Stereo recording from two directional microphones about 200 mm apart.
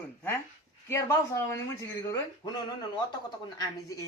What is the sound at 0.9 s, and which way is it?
A man's voice, 15° left (ahead or behind).